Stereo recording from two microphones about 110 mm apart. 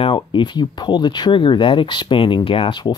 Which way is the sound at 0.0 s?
50° left (ahead or behind).